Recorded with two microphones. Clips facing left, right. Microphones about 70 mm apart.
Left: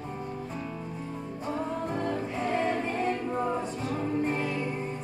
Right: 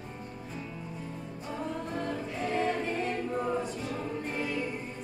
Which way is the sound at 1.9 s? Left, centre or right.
Left.